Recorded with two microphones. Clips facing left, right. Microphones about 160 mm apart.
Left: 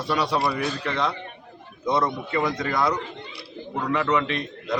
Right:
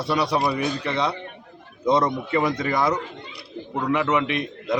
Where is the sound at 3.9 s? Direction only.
5° right (ahead or behind).